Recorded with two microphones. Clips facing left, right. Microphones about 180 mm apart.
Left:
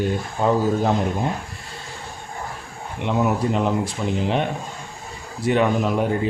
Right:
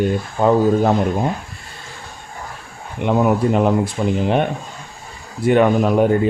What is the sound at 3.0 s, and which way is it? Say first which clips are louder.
Speech: right 5 dB; 55° right (ahead or behind).